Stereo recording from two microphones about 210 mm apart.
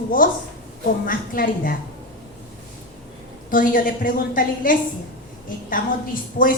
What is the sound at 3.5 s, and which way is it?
A woman's voice, 40° left (ahead or behind).